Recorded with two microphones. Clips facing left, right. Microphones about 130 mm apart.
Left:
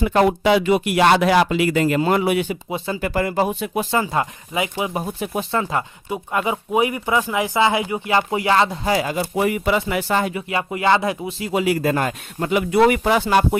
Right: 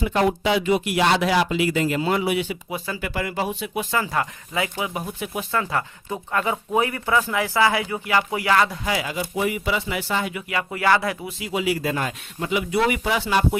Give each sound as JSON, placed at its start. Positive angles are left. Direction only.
{"t": 0.0, "sound": "speech", "side_deg": 60}
{"t": 2.6, "sound": "speech", "side_deg": 25}
{"t": 3.0, "sound": "speech", "side_deg": 40}
{"t": 3.9, "sound": "speech", "side_deg": 20}
{"t": 4.9, "sound": "speech", "side_deg": 35}
{"t": 6.1, "sound": "speech", "side_deg": 15}
{"t": 8.9, "sound": "speech", "side_deg": 40}
{"t": 10.3, "sound": "speech", "side_deg": 25}
{"t": 11.3, "sound": "speech", "side_deg": 45}